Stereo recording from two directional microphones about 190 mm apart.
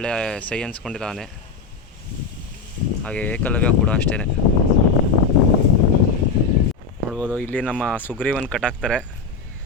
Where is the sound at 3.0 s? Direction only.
10° left (ahead or behind).